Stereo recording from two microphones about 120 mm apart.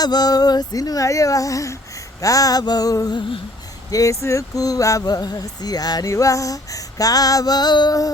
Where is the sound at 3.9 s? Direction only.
25° left (ahead or behind).